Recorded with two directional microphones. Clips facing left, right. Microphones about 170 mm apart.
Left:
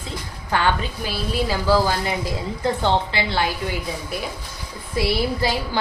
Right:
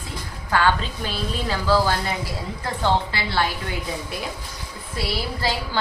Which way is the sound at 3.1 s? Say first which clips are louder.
Left 2 dB; 20° left (ahead or behind).